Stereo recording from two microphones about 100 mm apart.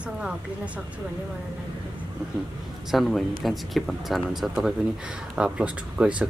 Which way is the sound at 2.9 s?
Centre (ahead or behind).